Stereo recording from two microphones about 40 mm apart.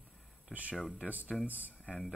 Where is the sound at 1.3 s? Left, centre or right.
Centre.